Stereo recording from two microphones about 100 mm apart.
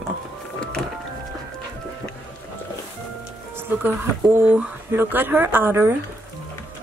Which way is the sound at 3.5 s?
20° right (ahead or behind).